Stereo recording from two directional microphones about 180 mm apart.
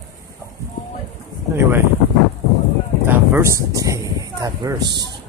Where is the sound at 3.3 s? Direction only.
15° right (ahead or behind).